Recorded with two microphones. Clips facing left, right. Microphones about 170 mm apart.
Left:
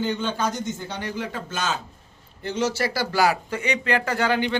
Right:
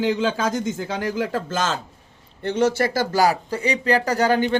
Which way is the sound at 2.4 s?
55° right (ahead or behind).